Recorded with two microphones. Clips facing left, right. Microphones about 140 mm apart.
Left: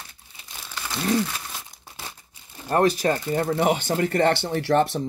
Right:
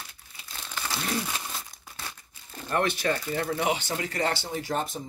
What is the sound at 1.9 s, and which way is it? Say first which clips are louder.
Crumpling: left 2 dB; 25° left (ahead or behind).